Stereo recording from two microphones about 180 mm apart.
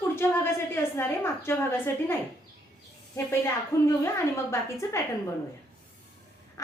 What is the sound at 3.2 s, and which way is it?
A woman's voice, 15° left (ahead or behind).